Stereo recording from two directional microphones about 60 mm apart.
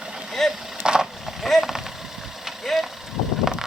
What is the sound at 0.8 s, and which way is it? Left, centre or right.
Vehicle, centre.